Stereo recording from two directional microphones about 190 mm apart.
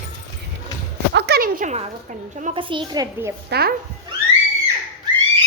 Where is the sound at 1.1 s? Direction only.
55° right (ahead or behind).